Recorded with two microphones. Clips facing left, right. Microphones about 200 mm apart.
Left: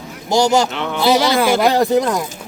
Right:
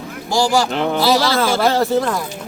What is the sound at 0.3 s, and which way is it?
Speech, 20° left (ahead or behind).